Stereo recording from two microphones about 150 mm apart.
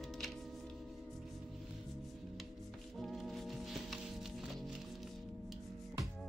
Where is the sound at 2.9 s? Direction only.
Centre (ahead or behind).